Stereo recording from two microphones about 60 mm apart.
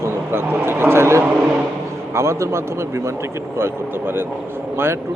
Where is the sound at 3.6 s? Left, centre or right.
Right.